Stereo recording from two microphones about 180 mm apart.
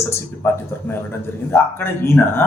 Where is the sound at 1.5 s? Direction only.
10° left (ahead or behind).